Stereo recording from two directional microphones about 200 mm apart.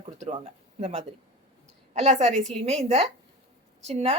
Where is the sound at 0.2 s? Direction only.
30° right (ahead or behind).